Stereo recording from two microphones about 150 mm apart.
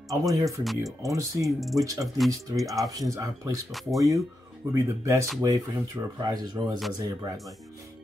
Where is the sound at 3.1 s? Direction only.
25° right (ahead or behind).